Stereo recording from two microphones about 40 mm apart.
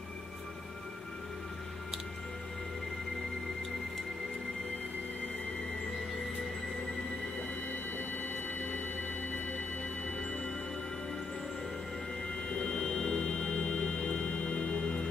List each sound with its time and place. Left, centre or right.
12.4 s music: left